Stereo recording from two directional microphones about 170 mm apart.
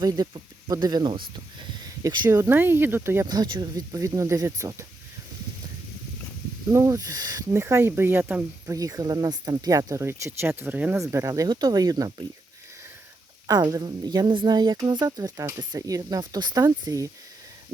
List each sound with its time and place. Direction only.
0.2 s speech: 25° right (ahead or behind)
6.7 s speech: 20° right (ahead or behind)
13.5 s speech: 20° right (ahead or behind)